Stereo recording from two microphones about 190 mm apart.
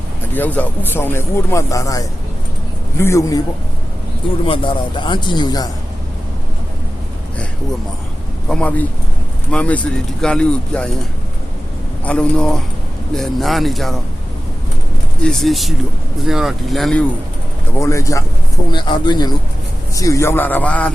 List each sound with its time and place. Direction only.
0.3 s speech: 10° left (ahead or behind)
4.4 s speech: 25° left (ahead or behind)
8.4 s speech: 5° left (ahead or behind)
12.0 s speech: 5° left (ahead or behind)
15.2 s speech: centre (ahead or behind)
17.7 s speech: 15° left (ahead or behind)